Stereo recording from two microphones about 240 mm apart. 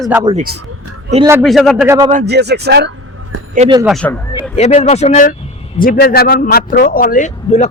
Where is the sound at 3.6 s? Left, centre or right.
Centre.